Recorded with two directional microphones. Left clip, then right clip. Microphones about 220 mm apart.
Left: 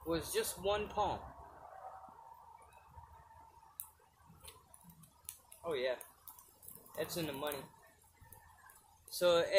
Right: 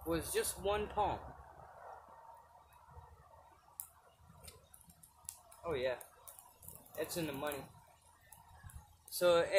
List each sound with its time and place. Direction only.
0.1 s speech: 15° right (ahead or behind)
5.6 s speech: 15° right (ahead or behind)
7.0 s speech: 15° right (ahead or behind)
9.1 s speech: 15° right (ahead or behind)